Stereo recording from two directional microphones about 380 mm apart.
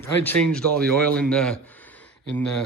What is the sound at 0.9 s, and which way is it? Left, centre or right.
Speech, centre.